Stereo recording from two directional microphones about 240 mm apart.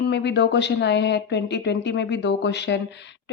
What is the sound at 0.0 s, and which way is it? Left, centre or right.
Speech, left.